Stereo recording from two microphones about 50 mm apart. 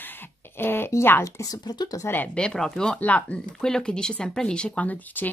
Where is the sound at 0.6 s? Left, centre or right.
Left.